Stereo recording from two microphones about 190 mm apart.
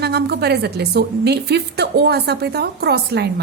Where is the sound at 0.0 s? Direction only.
60° right (ahead or behind).